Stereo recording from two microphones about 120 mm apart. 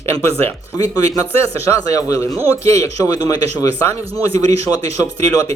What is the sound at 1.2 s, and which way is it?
A man's voice, 25° left (ahead or behind).